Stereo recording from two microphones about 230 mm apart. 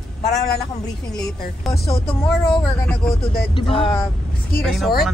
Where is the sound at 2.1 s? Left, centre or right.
Centre.